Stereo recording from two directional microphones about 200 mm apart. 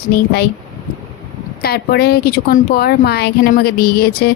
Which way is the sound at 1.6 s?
50° left (ahead or behind).